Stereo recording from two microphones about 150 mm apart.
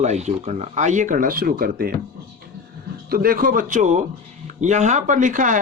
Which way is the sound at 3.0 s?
75° right (ahead or behind).